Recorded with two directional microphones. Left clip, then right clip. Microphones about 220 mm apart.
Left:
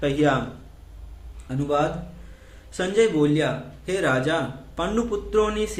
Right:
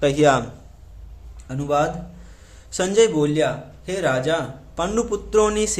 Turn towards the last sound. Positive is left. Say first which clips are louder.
# right 4 dB
turn(degrees=-30)  # may be behind; listen again after turning